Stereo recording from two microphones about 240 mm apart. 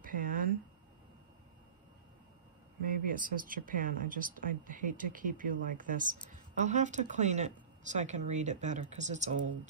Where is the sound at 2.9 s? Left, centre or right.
Right.